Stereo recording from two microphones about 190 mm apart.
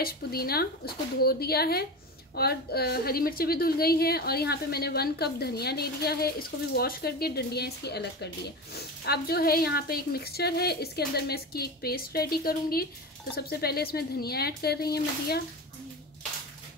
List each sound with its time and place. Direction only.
0.0 s a woman's voice: 55° left (ahead or behind)